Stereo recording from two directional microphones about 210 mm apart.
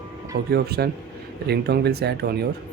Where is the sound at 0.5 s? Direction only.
50° right (ahead or behind).